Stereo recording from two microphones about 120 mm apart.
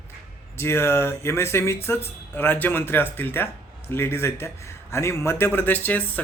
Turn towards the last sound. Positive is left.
turn(degrees=15)  # may be behind; listen again after turning